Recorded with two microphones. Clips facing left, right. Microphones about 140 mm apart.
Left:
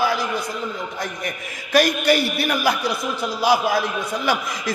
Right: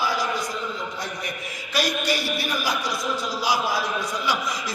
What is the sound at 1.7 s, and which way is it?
Speech, 55° left (ahead or behind).